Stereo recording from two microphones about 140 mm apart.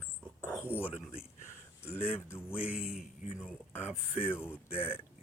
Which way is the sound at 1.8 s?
15° left (ahead or behind).